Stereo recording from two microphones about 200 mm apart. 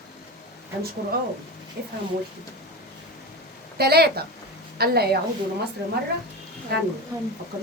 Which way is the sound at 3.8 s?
50° right (ahead or behind).